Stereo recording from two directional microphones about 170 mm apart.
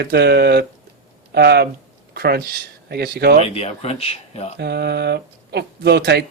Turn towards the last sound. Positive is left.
turn(degrees=-75)  # may be behind; listen again after turning